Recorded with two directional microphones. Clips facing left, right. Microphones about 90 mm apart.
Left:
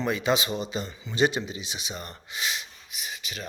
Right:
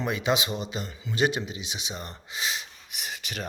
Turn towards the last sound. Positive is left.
turn(degrees=-60)  # may be behind; listen again after turning